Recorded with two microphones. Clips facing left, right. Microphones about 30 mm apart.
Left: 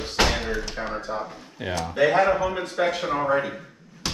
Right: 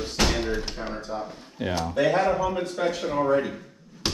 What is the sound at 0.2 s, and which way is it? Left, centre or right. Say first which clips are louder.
Door: left 2 dB; centre.